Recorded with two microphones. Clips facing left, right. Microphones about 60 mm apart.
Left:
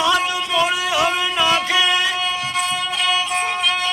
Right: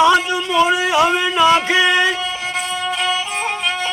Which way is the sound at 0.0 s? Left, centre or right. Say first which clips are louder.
Right 5 dB; right.